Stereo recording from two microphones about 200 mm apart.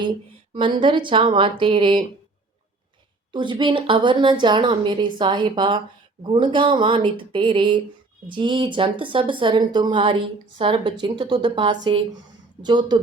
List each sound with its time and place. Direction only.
0.5 s speech: 25° right (ahead or behind)
3.3 s speech: 25° right (ahead or behind)